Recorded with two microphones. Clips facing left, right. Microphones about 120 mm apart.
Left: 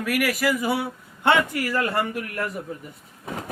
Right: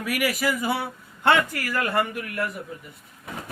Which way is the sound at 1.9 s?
40° left (ahead or behind).